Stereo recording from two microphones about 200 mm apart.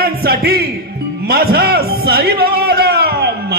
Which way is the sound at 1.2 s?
50° right (ahead or behind).